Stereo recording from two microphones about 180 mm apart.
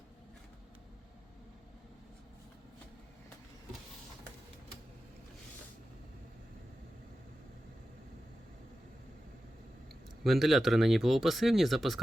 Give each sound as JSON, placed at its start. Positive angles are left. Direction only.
{"t": 10.2, "sound": "speech", "side_deg": 0}